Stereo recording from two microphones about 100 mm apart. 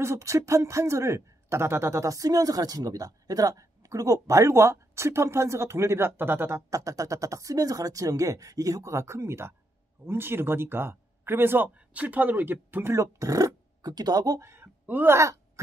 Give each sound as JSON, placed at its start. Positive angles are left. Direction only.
{"t": 0.0, "sound": "speech", "side_deg": -30}
{"t": 6.7, "sound": "speech", "side_deg": -35}
{"t": 15.1, "sound": "groan", "side_deg": -30}